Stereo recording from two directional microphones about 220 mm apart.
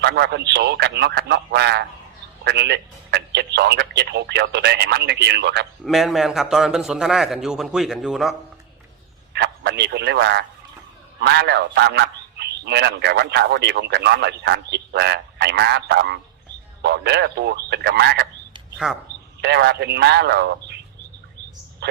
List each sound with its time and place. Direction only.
0.0 s a man's voice: 50° right (ahead or behind)
5.8 s a man's voice: centre (ahead or behind)
9.3 s a man's voice: 50° right (ahead or behind)
18.8 s a man's voice: 5° right (ahead or behind)
19.4 s a man's voice: 50° right (ahead or behind)